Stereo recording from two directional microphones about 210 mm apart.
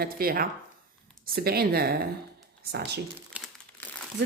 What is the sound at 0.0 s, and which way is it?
Speech, 45° right (ahead or behind).